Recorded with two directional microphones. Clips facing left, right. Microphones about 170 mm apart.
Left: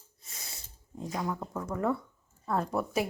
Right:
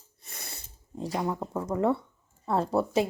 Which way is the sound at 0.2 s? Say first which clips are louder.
Right 4 dB; 60° right (ahead or behind).